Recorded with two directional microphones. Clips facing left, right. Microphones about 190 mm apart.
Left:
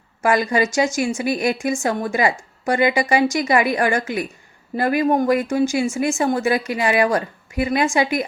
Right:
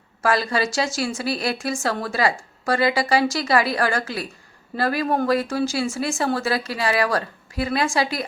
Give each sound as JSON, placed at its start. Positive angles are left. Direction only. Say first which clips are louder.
{"t": 0.2, "sound": "a woman's voice", "louder": "left 3 dB", "side_deg": 20}